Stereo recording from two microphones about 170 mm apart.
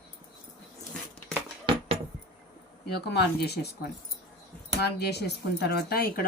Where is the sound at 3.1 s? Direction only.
75° left (ahead or behind).